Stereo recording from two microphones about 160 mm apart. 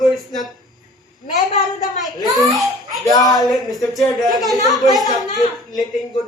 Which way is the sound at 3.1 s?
20° left (ahead or behind).